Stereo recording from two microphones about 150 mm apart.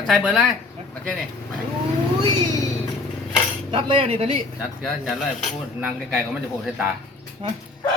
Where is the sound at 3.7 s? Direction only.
35° right (ahead or behind).